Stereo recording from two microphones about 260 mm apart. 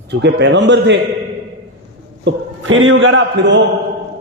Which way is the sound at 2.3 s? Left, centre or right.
Right.